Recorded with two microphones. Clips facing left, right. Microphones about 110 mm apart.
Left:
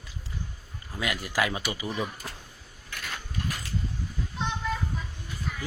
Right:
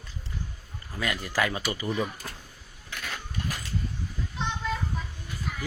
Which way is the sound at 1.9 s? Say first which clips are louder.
Right 2 dB; centre (ahead or behind).